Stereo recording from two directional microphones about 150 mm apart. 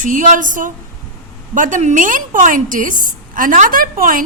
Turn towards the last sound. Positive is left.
turn(degrees=-65)  # may be behind; listen again after turning